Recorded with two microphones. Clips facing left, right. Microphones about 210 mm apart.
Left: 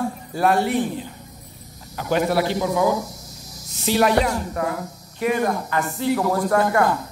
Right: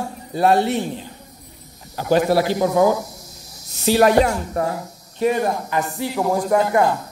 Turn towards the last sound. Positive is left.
turn(degrees=-15)  # may be behind; listen again after turning